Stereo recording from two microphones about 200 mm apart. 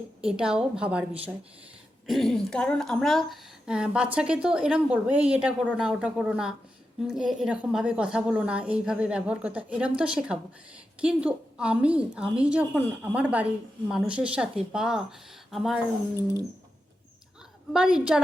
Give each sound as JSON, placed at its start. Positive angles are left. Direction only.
{"t": 0.2, "sound": "a woman's voice", "side_deg": -5}
{"t": 2.0, "sound": "a woman's voice", "side_deg": 0}
{"t": 17.7, "sound": "a woman's voice", "side_deg": -5}